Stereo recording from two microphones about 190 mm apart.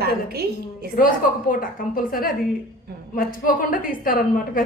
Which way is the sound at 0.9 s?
45° left (ahead or behind).